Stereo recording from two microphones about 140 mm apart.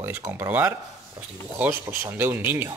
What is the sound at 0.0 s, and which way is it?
Speech, 20° right (ahead or behind).